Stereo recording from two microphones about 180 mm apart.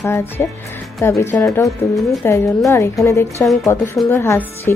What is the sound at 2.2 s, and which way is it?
Speech, 15° left (ahead or behind).